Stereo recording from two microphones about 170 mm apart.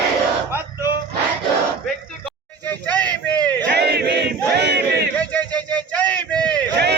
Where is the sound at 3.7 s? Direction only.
75° right (ahead or behind).